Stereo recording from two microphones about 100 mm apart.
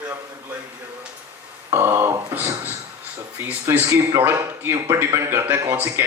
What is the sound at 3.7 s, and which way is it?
Speech, 25° right (ahead or behind).